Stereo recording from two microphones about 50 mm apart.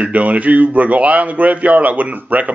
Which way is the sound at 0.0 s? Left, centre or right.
Right.